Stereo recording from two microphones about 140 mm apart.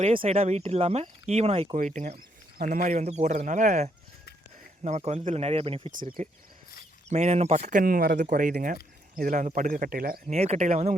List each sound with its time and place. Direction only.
0.1 s speech: 40° right (ahead or behind)
1.7 s speech: 60° right (ahead or behind); by 5.9 s 40° right (ahead or behind)
6.2 s speech: 60° right (ahead or behind)
7.8 s speech: 90° right
10.3 s speech: 50° right (ahead or behind)